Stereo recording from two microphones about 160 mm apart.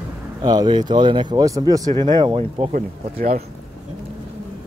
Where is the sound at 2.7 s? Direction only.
60° right (ahead or behind).